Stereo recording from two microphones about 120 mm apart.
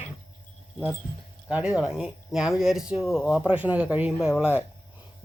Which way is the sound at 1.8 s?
5° right (ahead or behind).